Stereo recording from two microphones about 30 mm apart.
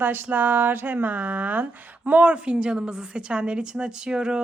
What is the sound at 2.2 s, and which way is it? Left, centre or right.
A woman's voice, right.